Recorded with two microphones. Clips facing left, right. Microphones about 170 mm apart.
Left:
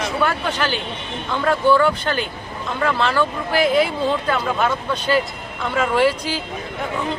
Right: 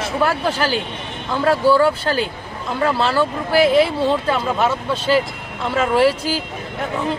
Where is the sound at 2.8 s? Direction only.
30° right (ahead or behind).